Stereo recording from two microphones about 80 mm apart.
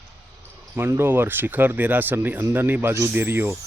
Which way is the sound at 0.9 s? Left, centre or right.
Right.